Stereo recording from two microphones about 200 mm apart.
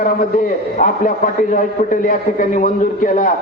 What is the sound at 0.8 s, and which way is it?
A man's voice, 40° left (ahead or behind).